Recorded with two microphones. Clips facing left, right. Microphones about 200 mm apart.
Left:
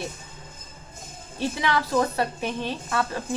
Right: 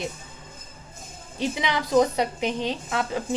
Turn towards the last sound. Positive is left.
turn(degrees=-15)  # may be behind; listen again after turning